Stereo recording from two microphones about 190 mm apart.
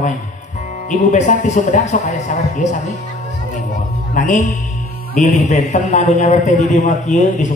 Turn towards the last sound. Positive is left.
turn(degrees=40)  # may be behind; listen again after turning